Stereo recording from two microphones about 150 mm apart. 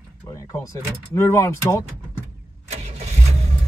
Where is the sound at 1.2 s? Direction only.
15° left (ahead or behind).